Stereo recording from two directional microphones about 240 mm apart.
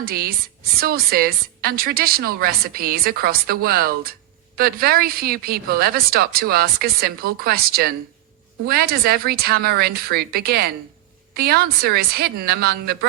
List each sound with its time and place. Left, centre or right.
0.0 s a woman's voice: right